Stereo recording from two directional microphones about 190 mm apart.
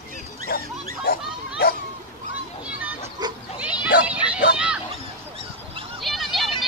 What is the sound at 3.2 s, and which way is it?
Goat, 20° right (ahead or behind).